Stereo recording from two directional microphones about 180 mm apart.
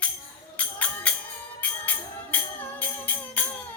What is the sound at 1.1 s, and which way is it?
Music, 5° left (ahead or behind).